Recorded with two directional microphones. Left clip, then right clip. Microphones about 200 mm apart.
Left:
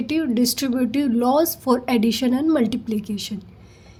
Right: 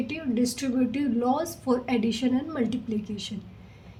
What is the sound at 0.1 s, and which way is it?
A woman's voice, 45° left (ahead or behind).